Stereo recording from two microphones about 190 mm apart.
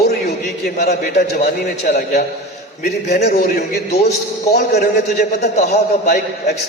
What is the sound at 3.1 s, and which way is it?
Speech, 50° left (ahead or behind).